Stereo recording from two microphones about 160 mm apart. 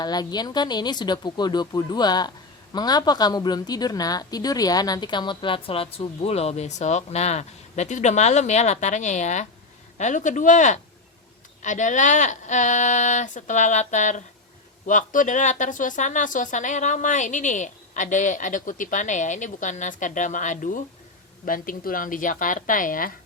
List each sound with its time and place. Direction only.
0.0 s a woman's voice: 25° left (ahead or behind); by 23.1 s 60° left (ahead or behind)